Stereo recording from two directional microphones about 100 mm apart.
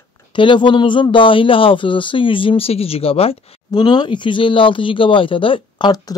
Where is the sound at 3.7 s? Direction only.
45° left (ahead or behind).